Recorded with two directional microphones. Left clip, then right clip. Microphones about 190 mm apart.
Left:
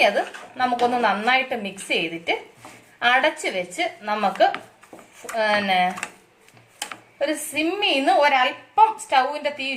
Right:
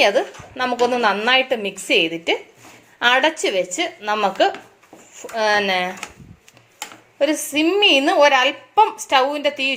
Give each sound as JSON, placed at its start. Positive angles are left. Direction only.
{"t": 0.5, "sound": "a woman's voice", "side_deg": -45}
{"t": 7.2, "sound": "a woman's voice", "side_deg": -50}